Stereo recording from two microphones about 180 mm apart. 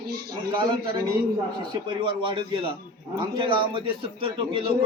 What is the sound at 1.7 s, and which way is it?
A man's voice, 25° right (ahead or behind).